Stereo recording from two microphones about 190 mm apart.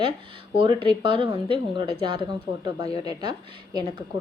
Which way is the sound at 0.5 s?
25° right (ahead or behind).